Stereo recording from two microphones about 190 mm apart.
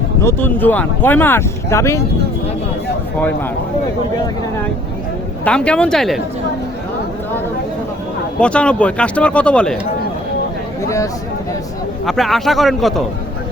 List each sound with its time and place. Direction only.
0.3 s speech: 10° left (ahead or behind)
5.5 s speech: 5° left (ahead or behind)
8.4 s speech: 5° left (ahead or behind)
10.8 s speech: 15° left (ahead or behind)
12.0 s speech: centre (ahead or behind)